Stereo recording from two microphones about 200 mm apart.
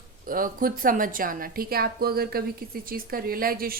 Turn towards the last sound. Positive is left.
turn(degrees=-45)  # may be behind; listen again after turning